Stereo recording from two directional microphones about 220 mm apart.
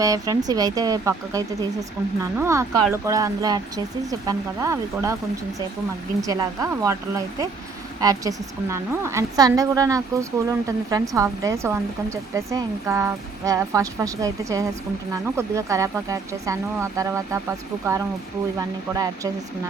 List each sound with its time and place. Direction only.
0.0 s speech: 15° right (ahead or behind)
6.2 s speech: 15° right (ahead or behind)
18.9 s speech: 15° right (ahead or behind)